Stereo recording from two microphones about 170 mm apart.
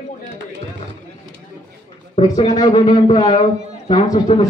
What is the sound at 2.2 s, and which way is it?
Speech, 25° left (ahead or behind).